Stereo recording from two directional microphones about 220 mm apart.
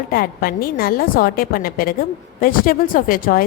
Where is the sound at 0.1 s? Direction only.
40° left (ahead or behind).